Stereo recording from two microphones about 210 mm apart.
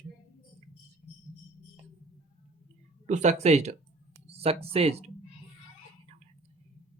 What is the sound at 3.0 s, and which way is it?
Speech, 35° right (ahead or behind).